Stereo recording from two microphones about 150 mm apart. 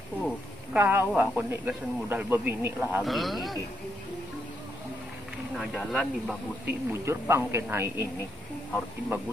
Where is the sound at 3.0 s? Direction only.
Centre (ahead or behind).